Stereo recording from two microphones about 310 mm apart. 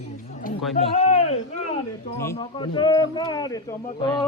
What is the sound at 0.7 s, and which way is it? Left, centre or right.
Speech, centre.